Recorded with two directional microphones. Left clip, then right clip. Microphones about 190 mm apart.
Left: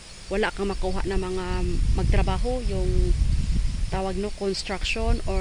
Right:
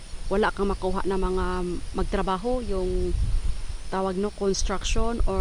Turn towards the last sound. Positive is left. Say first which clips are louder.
# even
turn(degrees=-10)  # may be behind; listen again after turning